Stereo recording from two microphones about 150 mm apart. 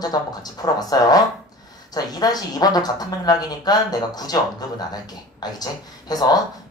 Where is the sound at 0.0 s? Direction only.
25° left (ahead or behind).